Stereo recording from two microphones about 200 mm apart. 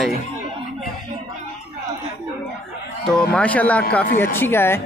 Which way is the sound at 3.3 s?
5° left (ahead or behind).